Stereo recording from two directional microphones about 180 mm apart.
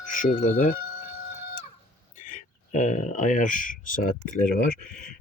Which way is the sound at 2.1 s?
45° left (ahead or behind).